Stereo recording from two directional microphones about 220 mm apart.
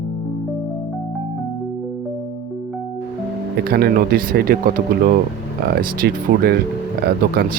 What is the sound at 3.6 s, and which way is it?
Speech, 45° right (ahead or behind).